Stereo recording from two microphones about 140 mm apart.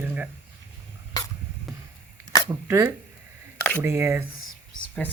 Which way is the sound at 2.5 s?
20° right (ahead or behind).